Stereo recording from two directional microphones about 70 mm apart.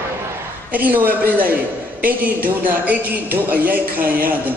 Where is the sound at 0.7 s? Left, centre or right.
Right.